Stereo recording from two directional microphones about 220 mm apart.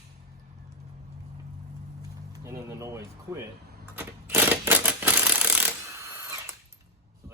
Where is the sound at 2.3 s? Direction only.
15° right (ahead or behind).